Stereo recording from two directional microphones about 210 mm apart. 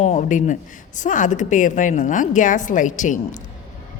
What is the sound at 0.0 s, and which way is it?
A woman's voice, 35° left (ahead or behind).